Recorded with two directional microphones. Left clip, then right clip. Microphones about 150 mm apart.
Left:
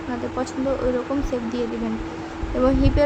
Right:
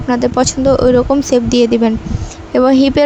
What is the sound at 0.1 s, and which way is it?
Speech, 55° right (ahead or behind).